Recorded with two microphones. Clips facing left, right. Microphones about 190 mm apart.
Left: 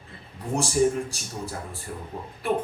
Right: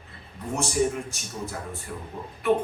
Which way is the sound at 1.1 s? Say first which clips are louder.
Even; 35° left (ahead or behind).